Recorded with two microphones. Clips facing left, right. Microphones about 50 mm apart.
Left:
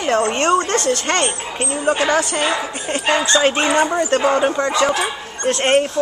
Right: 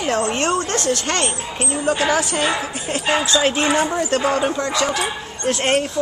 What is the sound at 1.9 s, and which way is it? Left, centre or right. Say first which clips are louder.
Speech: left 2 dB; centre.